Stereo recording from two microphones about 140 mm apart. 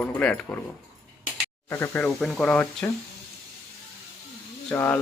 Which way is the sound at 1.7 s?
20° left (ahead or behind).